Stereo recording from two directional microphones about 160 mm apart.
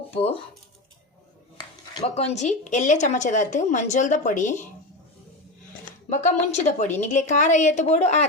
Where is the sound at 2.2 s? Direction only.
45° left (ahead or behind).